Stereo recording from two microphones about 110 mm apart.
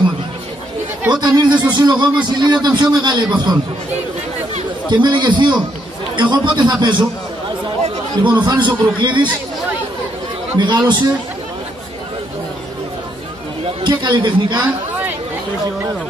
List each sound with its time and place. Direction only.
1.1 s a man's voice: 40° right (ahead or behind)
4.8 s speech: 45° right (ahead or behind)
8.2 s speech: 45° right (ahead or behind)
10.6 s speech: 45° right (ahead or behind)
13.8 s speech: 45° right (ahead or behind)
14.6 s a sound: 15° right (ahead or behind)